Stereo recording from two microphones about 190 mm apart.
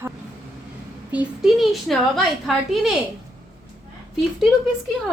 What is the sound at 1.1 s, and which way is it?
A woman's voice, 5° right (ahead or behind).